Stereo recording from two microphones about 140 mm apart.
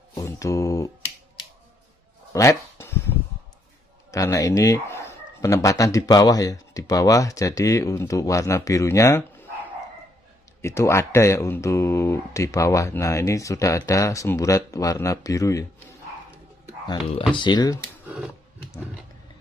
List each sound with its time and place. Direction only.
0.1 s mantra: 20° left (ahead or behind)
2.3 s a sound: 20° left (ahead or behind)
4.1 s speech: 25° left (ahead or behind)
10.6 s speech: 20° left (ahead or behind)
17.4 s speech: 30° left (ahead or behind)